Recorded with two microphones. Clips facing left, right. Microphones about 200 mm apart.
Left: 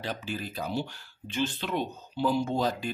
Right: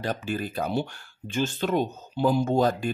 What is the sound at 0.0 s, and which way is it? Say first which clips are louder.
Speech: right 5 dB; 50° right (ahead or behind).